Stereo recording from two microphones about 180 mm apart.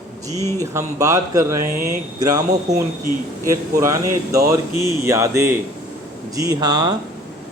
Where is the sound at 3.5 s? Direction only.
15° right (ahead or behind).